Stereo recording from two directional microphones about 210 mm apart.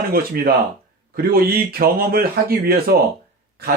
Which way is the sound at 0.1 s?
45° right (ahead or behind).